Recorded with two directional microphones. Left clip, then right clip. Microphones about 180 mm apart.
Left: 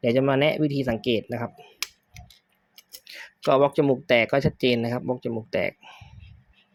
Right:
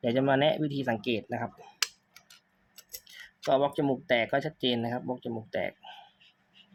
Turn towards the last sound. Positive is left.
turn(degrees=35)  # may be behind; listen again after turning